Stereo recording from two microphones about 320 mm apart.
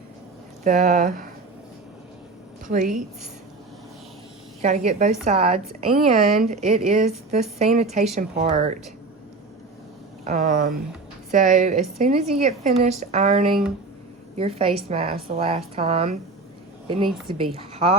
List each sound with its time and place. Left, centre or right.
0.6 s a woman's voice: right
2.6 s a woman's voice: right
4.6 s a woman's voice: right
10.2 s a woman's voice: right